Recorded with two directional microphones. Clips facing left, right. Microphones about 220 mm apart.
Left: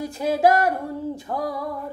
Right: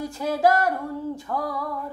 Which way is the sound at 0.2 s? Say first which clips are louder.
Left 2 dB; 20° left (ahead or behind).